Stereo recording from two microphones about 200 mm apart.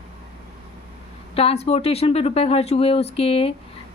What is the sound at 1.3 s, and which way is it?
Speech, 30° left (ahead or behind).